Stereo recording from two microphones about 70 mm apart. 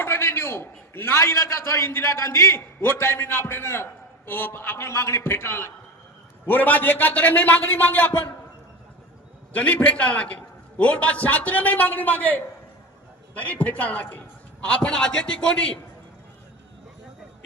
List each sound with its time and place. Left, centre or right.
0.0 s a man's voice: left
9.6 s a man's voice: left